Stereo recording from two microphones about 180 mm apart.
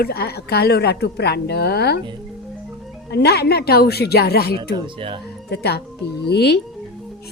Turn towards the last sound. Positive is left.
turn(degrees=65)  # may be behind; listen again after turning